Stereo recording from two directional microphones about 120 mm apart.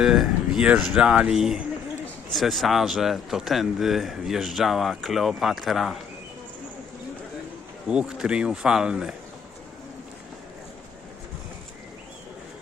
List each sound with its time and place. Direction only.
0.0 s speech: 5° right (ahead or behind)
7.9 s speech: 5° right (ahead or behind)